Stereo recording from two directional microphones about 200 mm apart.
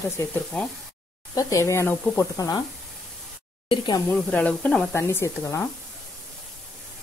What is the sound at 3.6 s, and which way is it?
Speech, 25° left (ahead or behind).